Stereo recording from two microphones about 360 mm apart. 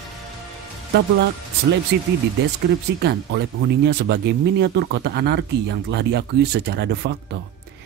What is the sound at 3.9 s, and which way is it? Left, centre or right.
Speech, right.